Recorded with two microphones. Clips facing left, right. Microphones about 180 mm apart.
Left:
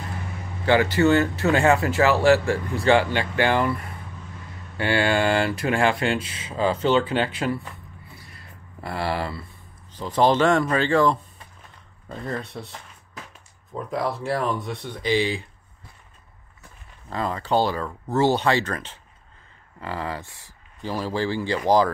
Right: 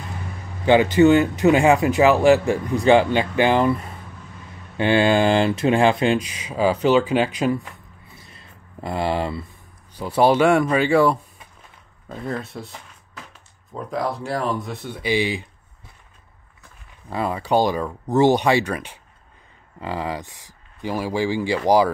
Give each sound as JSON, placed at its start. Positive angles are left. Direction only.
{"t": 0.7, "sound": "speech", "side_deg": -20}
{"t": 8.2, "sound": "a sound", "side_deg": -20}
{"t": 10.0, "sound": "speech", "side_deg": -10}
{"t": 13.7, "sound": "speech", "side_deg": 0}
{"t": 17.1, "sound": "speech", "side_deg": -10}